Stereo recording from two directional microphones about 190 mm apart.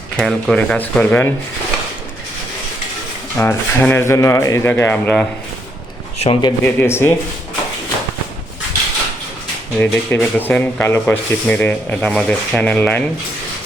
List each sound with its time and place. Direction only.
0.2 s speech: 5° left (ahead or behind)
3.3 s speech: 10° left (ahead or behind)
6.1 s a man's voice: 35° left (ahead or behind)
6.7 s speech: 15° left (ahead or behind)
9.7 s speech: 10° left (ahead or behind)